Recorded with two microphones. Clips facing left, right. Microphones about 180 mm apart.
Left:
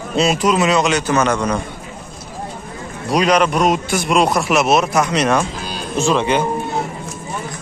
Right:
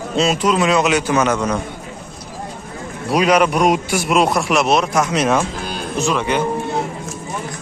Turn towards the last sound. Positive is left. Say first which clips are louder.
# left 2 dB
turn(degrees=25)  # may be behind; listen again after turning